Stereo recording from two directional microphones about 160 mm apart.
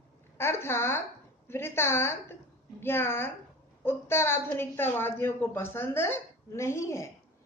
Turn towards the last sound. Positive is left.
turn(degrees=15)  # may be behind; listen again after turning